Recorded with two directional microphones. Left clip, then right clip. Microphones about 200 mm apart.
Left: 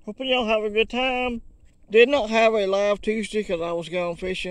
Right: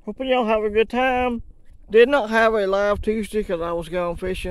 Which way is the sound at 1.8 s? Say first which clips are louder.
Right 2 dB; 10° right (ahead or behind).